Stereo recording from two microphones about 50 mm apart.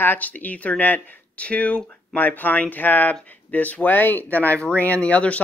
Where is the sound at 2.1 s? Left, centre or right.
Left.